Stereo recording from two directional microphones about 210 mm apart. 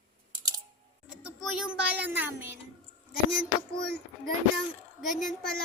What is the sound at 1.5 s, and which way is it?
Speech, 5° right (ahead or behind).